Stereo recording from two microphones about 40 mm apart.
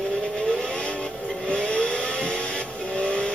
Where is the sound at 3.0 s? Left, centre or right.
Left.